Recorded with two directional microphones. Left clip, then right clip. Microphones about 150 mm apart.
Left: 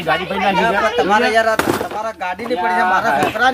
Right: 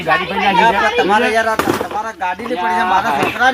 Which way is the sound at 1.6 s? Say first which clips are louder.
Right 1 dB; centre (ahead or behind).